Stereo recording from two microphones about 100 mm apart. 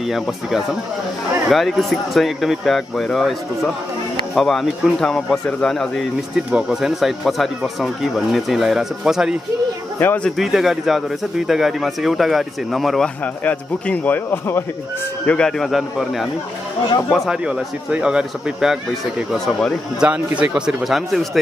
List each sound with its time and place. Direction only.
0.0 s speech: 5° right (ahead or behind)
9.9 s speech: 20° left (ahead or behind)
10.2 s speech: centre (ahead or behind)
13.2 s speech: 15° left (ahead or behind)
15.2 s speech: 10° left (ahead or behind)
17.3 s speech: 10° right (ahead or behind)
20.1 s speech: 15° right (ahead or behind)